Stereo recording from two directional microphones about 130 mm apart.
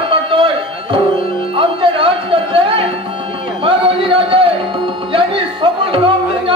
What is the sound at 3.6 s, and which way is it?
Music, 40° right (ahead or behind).